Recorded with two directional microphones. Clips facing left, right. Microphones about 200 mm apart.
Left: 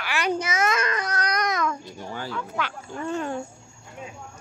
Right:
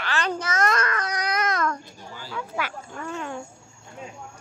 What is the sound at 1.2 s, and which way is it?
Babbling, 5° right (ahead or behind).